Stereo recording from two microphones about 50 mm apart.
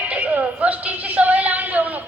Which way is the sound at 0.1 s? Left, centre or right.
Right.